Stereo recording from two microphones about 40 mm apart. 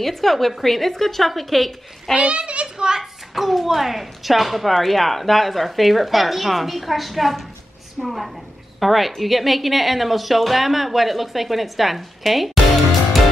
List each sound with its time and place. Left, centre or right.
0.0 s speech: centre
2.1 s a child's voice: right
3.0 s speech: centre